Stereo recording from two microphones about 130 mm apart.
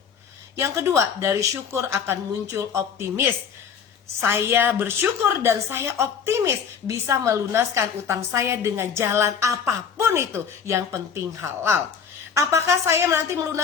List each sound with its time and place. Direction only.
0.5 s a woman's voice: 20° right (ahead or behind)
12.3 s a woman's voice: 20° right (ahead or behind)